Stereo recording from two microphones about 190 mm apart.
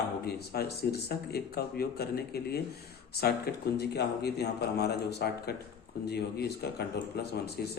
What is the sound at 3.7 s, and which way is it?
Speech, 60° left (ahead or behind).